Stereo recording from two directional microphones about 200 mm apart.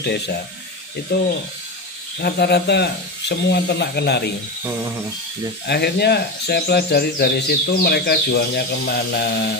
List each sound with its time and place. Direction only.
1.1 s speech: 55° left (ahead or behind)
5.7 s speech: 55° left (ahead or behind)